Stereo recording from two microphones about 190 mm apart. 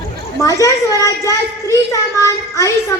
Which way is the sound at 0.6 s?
15° left (ahead or behind).